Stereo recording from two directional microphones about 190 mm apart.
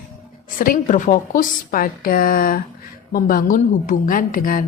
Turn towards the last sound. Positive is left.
turn(degrees=50)  # may be behind; listen again after turning